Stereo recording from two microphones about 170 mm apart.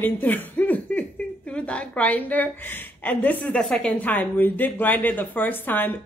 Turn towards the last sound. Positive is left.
turn(degrees=10)  # may be behind; listen again after turning